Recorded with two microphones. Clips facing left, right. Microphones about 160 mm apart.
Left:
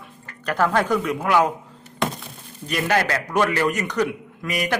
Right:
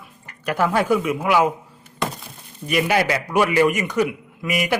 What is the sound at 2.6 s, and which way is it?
A man's voice, 10° right (ahead or behind).